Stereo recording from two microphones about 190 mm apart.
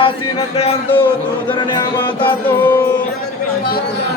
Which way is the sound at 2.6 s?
10° left (ahead or behind).